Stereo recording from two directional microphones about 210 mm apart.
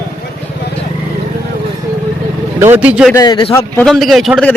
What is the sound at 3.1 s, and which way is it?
Speech, 15° left (ahead or behind).